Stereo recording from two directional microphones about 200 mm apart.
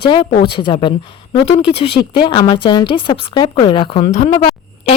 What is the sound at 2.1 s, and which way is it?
A woman's voice, 25° left (ahead or behind).